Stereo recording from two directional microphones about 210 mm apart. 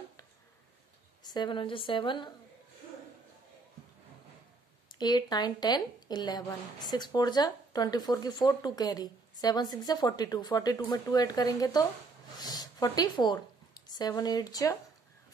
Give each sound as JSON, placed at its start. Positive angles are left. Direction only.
{"t": 1.2, "sound": "speech", "side_deg": 20}
{"t": 4.8, "sound": "a woman's voice", "side_deg": 20}